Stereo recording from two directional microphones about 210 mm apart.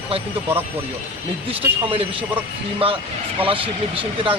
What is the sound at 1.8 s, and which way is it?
Speech, 25° right (ahead or behind).